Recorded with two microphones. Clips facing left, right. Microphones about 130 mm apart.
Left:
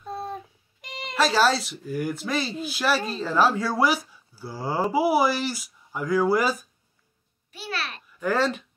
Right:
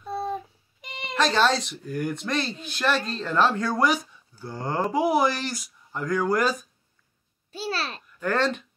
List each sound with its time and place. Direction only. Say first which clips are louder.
0.0 s speech: right 3 dB; centre (ahead or behind)
7.5 s babbling: right 3 dB; 30° right (ahead or behind)
8.2 s speech: left 1 dB; 5° left (ahead or behind)